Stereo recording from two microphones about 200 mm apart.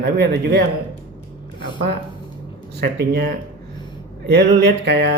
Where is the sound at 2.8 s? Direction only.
55° right (ahead or behind).